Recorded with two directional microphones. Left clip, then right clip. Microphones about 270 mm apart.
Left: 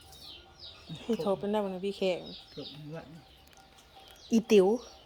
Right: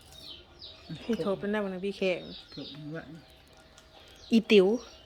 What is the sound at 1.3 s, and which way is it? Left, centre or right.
Speech, centre.